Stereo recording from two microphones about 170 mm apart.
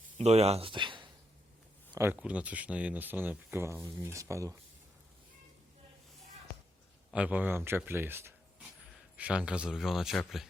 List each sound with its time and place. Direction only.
0.2 s speech: 40° right (ahead or behind)
2.0 s speech: 10° right (ahead or behind)
7.1 s speech: 10° right (ahead or behind)